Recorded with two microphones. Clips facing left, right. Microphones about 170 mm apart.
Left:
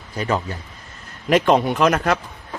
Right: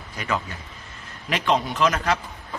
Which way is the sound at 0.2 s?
35° left (ahead or behind).